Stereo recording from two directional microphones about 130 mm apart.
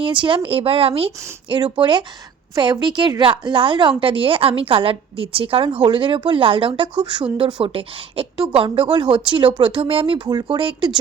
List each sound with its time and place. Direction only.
0.0 s a woman's voice: 40° right (ahead or behind)